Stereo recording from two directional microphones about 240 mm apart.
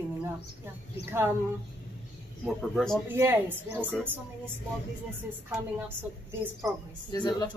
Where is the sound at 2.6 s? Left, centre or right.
Centre.